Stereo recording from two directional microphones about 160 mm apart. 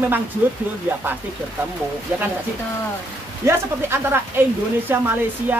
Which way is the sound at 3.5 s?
15° right (ahead or behind).